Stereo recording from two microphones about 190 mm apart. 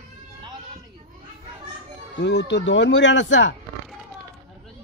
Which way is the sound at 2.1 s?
65° left (ahead or behind).